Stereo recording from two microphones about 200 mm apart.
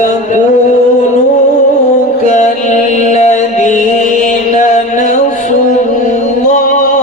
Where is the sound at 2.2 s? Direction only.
35° left (ahead or behind).